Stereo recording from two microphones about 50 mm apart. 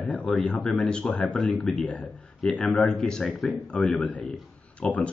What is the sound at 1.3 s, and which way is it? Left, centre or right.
Speech, centre.